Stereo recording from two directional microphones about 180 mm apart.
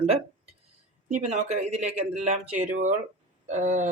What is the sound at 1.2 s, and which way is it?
Speech, 40° right (ahead or behind).